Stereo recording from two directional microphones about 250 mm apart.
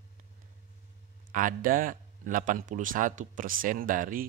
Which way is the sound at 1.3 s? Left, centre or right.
Right.